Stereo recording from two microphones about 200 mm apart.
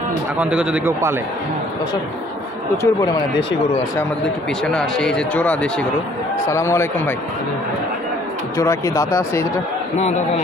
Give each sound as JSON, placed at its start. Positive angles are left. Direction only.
{"t": 0.4, "sound": "speech", "side_deg": -5}
{"t": 2.8, "sound": "speech", "side_deg": 15}
{"t": 4.6, "sound": "speech", "side_deg": 5}
{"t": 8.5, "sound": "speech", "side_deg": 15}
{"t": 9.9, "sound": "speech", "side_deg": 35}